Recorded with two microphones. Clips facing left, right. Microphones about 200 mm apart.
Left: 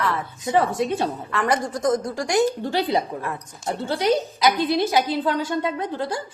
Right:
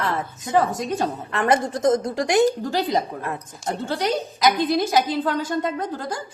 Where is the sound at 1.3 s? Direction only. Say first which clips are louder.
Right 4 dB; 25° right (ahead or behind).